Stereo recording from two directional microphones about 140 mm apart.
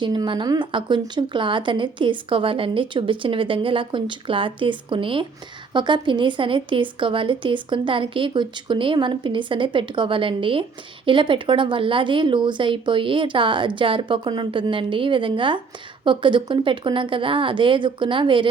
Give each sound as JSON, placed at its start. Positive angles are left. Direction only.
{"t": 0.0, "sound": "speech", "side_deg": -35}